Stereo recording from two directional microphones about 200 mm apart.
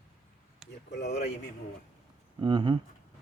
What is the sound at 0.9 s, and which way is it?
Speech, 55° left (ahead or behind).